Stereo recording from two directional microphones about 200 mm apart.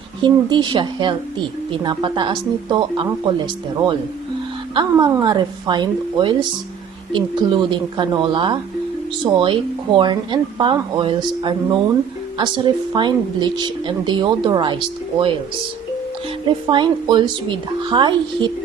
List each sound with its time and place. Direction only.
0.2 s speech: 25° right (ahead or behind)
4.7 s speech: 20° right (ahead or behind)
16.5 s speech: 25° right (ahead or behind)